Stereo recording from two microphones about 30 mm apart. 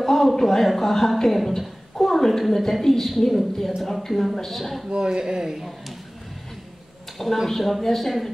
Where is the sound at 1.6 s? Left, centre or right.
Centre.